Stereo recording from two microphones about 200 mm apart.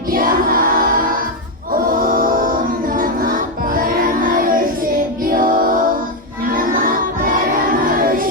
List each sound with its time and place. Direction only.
0.1 s choir: 45° right (ahead or behind)
1.7 s music: 45° right (ahead or behind)
6.5 s a sound: 45° right (ahead or behind)